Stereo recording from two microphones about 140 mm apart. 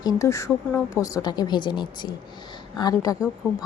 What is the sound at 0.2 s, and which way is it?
Speech, 20° left (ahead or behind).